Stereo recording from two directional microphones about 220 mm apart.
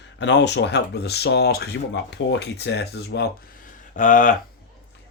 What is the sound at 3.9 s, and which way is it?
Speech, 35° left (ahead or behind).